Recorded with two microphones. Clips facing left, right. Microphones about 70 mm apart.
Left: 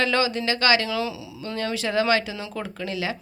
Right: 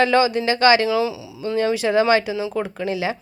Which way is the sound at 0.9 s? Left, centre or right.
Centre.